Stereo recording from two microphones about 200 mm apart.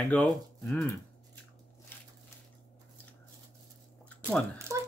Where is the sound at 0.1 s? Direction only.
5° left (ahead or behind).